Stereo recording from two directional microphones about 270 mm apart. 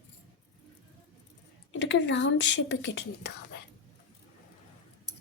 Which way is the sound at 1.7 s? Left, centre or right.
Left.